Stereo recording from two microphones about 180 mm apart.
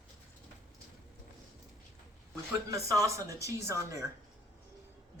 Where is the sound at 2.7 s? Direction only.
20° right (ahead or behind).